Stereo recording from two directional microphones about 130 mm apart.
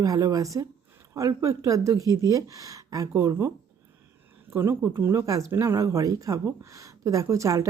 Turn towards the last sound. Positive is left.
turn(degrees=-25)  # may be behind; listen again after turning